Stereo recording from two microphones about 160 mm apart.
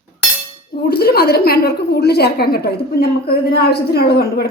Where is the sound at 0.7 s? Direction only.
75° left (ahead or behind).